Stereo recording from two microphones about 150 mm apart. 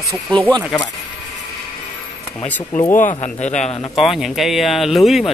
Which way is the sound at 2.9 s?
55° left (ahead or behind).